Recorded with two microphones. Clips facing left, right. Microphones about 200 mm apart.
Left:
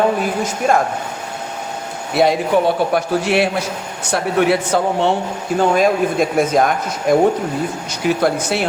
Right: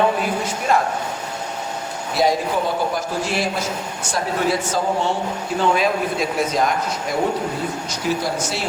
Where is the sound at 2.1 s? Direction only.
65° left (ahead or behind).